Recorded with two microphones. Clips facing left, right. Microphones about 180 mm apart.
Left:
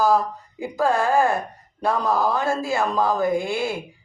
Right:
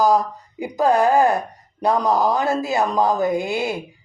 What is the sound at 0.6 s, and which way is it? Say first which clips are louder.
Speech: right 4 dB; 20° right (ahead or behind).